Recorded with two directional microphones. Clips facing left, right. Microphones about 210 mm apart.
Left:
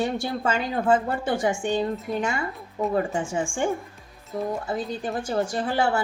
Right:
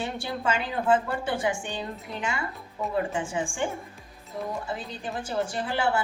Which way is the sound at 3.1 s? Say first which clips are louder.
Left 3 dB; 45° left (ahead or behind).